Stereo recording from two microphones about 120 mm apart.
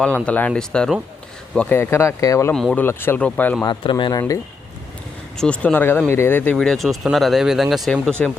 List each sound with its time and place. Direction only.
0.3 s speech: 10° left (ahead or behind)
2.5 s speech: 10° left (ahead or behind)
2.8 s speech: 20° left (ahead or behind)
3.6 s speech: 40° left (ahead or behind)
5.4 s speech: 10° left (ahead or behind)
6.6 s speech: centre (ahead or behind)